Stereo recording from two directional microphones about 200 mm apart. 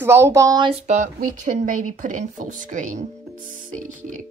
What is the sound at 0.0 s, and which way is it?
Speech, 10° right (ahead or behind).